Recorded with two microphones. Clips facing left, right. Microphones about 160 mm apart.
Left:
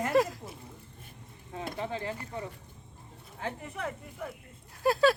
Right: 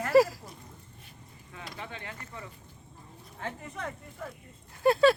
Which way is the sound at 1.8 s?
35° left (ahead or behind).